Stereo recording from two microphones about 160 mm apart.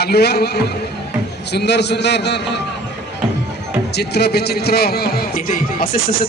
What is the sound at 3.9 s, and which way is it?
A man's voice, 90° left.